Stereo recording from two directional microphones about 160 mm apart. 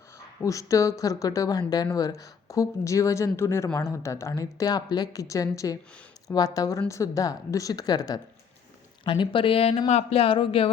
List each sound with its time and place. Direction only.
0.4 s speech: 20° left (ahead or behind)